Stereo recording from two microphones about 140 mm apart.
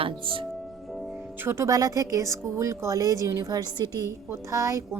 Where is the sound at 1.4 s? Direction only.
20° right (ahead or behind).